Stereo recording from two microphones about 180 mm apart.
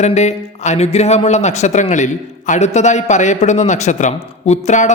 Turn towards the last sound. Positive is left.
turn(degrees=40)  # may be behind; listen again after turning